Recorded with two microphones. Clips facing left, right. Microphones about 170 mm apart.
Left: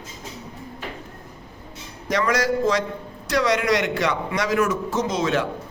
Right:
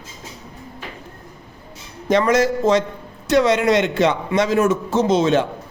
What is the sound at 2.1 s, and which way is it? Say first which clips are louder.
A man's voice: right 5 dB; 25° right (ahead or behind).